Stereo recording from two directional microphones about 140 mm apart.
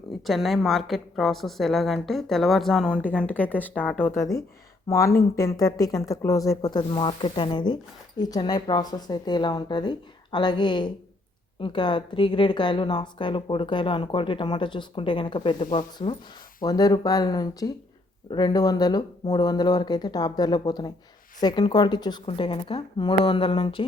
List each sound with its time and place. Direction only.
0.3 s a woman's voice: centre (ahead or behind); by 16.1 s 35° left (ahead or behind)
16.6 s a woman's voice: 25° left (ahead or behind)